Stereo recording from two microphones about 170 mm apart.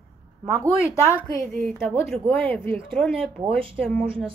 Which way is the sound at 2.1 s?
10° left (ahead or behind).